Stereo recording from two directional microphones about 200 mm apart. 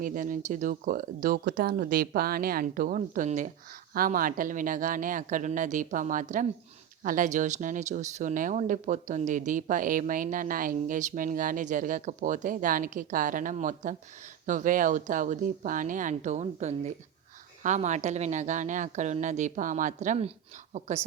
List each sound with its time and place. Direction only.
0.0 s speech: 40° right (ahead or behind)